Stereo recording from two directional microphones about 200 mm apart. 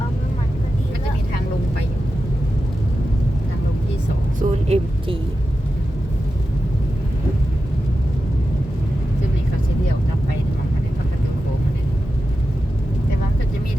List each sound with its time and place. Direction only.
4.4 s vehicle: 30° right (ahead or behind)